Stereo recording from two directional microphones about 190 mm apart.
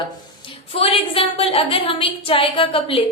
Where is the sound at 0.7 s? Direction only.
30° left (ahead or behind).